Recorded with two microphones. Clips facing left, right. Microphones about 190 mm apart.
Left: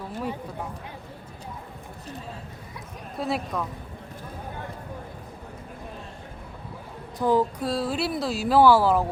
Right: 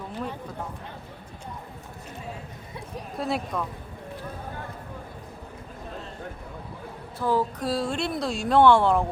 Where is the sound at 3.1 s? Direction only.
Centre (ahead or behind).